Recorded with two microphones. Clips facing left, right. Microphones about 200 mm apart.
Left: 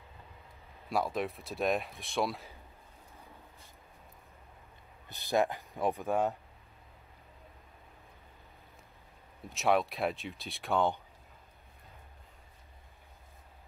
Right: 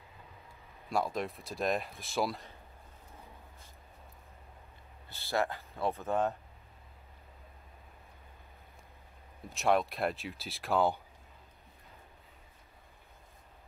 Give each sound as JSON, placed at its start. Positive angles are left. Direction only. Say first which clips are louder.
{"t": 0.8, "sound": "speech", "louder": "left 1 dB", "side_deg": 0}
{"t": 5.0, "sound": "speech", "louder": "left 3 dB", "side_deg": 15}
{"t": 9.5, "sound": "speech", "louder": "even", "side_deg": 0}